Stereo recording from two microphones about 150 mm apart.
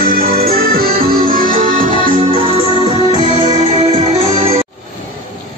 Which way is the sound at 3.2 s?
45° right (ahead or behind).